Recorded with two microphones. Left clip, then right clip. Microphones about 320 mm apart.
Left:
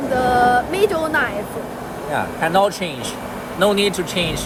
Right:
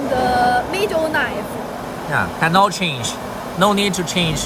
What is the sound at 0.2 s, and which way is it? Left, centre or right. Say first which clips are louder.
Music: left 2 dB; centre.